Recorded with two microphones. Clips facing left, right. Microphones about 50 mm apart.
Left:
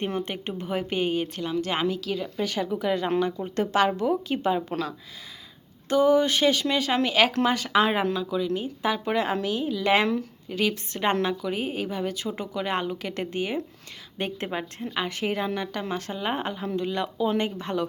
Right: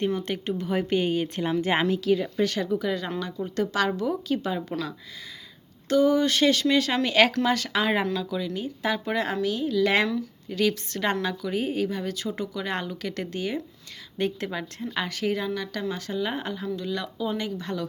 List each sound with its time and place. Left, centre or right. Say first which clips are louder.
0.2 s speech: right 2 dB; left
0.7 s speech: right 1 dB; centre
1.5 s speech: right 2 dB; centre
2.7 s speech: left 3 dB; left
5.9 s speech: left 1 dB; centre
8.5 s speech: left 1 dB; left
11.4 s speech: right 2 dB; centre; by 17.8 s left